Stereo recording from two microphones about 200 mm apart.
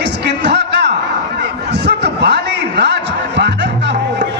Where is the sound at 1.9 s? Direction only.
55° right (ahead or behind).